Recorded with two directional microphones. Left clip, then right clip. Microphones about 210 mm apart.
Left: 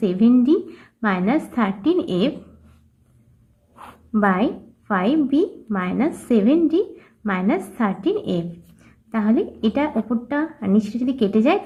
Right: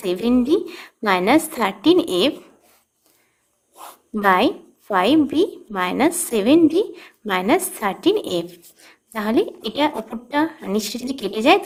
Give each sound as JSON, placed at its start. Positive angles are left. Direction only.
{"t": 0.0, "sound": "a woman's voice", "side_deg": -45}
{"t": 4.2, "sound": "a woman's voice", "side_deg": -45}